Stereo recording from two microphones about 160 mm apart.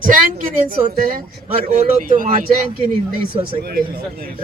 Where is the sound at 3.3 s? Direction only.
30° right (ahead or behind).